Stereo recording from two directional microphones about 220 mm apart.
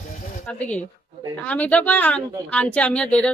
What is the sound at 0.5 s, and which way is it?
Speech, 5° left (ahead or behind).